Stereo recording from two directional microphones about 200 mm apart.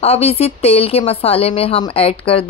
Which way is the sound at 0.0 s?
30° left (ahead or behind).